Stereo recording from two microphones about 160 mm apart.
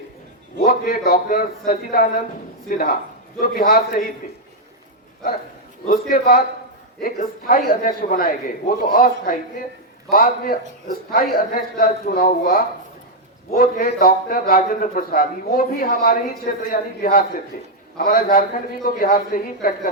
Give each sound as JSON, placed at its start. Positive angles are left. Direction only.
{"t": 0.6, "sound": "a man's voice", "side_deg": 65}
{"t": 5.9, "sound": "a man's voice", "side_deg": 70}